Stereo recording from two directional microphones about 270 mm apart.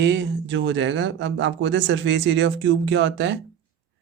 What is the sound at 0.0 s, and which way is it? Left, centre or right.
Speech, right.